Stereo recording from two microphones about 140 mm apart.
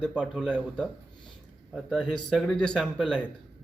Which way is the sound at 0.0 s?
10° left (ahead or behind).